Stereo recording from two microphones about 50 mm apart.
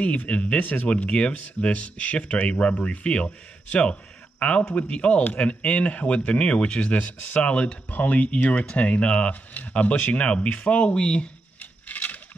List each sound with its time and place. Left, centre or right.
0.3 s speech: left
0.6 s speech: left
0.8 s speech: left
11.9 s a sound: left